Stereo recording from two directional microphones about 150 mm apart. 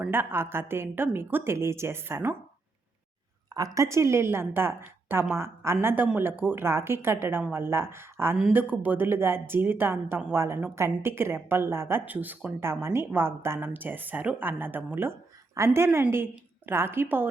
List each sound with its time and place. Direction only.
0.0 s a woman's voice: 15° right (ahead or behind)
3.5 s a woman's voice: 25° right (ahead or behind)